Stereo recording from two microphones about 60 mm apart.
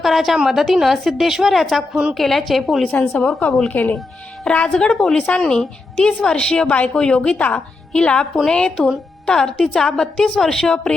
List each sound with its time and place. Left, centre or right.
0.0 s a woman's voice: centre
1.9 s a woman's voice: centre
2.1 s a woman's voice: centre
2.8 s a woman's voice: left